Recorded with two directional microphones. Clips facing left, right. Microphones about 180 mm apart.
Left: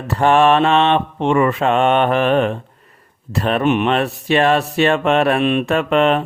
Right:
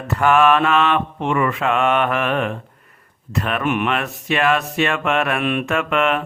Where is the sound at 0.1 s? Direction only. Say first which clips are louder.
Left 2 dB; 30° left (ahead or behind).